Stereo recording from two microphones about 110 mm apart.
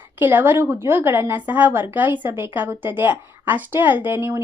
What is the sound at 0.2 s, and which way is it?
A woman's voice, 20° right (ahead or behind).